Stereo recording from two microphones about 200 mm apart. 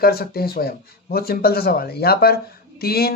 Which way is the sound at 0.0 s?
50° left (ahead or behind).